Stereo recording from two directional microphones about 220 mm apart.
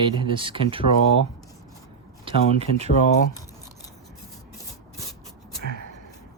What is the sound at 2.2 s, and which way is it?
Speech, 30° right (ahead or behind).